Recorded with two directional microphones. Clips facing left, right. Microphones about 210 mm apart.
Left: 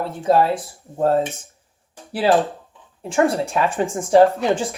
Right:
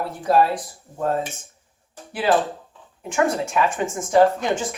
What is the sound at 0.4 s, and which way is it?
Speech, 30° left (ahead or behind).